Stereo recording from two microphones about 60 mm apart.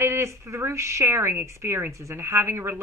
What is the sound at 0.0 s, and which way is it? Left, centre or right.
A woman's voice, right.